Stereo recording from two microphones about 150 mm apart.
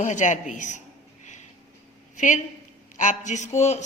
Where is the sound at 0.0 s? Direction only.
55° left (ahead or behind).